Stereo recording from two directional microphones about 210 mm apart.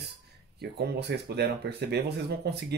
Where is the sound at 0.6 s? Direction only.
50° right (ahead or behind).